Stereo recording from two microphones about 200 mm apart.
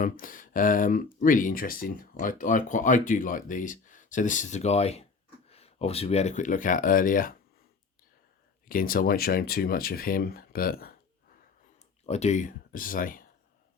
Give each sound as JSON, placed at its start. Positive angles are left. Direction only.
{"t": 0.0, "sound": "speech", "side_deg": 45}
{"t": 8.6, "sound": "speech", "side_deg": 45}
{"t": 12.0, "sound": "speech", "side_deg": 35}